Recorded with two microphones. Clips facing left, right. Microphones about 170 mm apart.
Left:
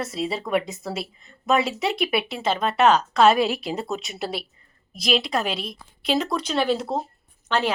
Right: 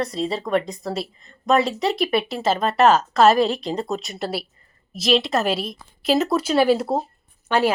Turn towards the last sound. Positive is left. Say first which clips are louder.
# right 4 dB
turn(degrees=-10)  # may be behind; listen again after turning